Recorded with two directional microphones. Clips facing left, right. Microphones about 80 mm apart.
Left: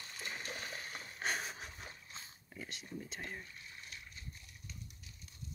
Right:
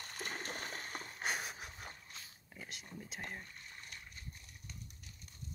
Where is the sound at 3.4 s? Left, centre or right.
Right.